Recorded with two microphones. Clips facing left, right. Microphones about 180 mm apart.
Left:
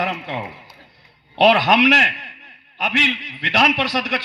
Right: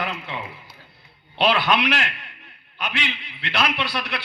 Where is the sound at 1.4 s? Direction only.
80° left.